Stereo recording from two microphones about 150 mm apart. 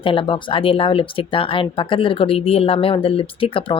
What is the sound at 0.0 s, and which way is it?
Speech, 35° left (ahead or behind).